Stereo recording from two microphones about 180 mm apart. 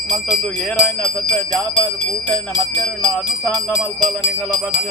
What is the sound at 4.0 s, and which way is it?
Jingle bell, 25° right (ahead or behind).